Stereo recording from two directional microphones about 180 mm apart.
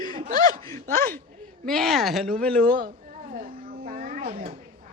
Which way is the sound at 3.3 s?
50° right (ahead or behind).